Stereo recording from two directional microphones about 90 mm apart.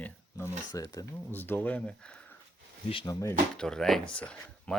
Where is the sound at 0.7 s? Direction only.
40° left (ahead or behind).